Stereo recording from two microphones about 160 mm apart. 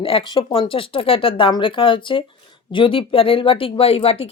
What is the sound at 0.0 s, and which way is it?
A woman's voice, 35° left (ahead or behind).